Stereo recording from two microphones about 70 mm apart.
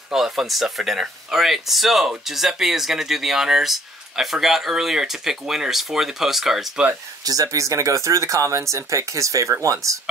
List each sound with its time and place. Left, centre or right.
0.1 s speech: centre
7.2 s speech: right